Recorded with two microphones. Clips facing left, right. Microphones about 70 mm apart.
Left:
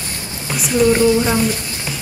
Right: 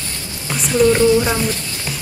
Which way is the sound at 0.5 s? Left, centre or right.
Centre.